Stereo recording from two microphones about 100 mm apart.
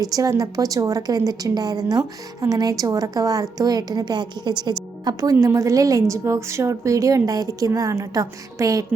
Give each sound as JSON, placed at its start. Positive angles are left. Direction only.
{"t": 0.0, "sound": "a woman's voice", "side_deg": -35}